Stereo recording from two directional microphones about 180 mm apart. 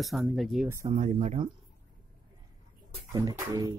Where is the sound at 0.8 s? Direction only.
45° right (ahead or behind).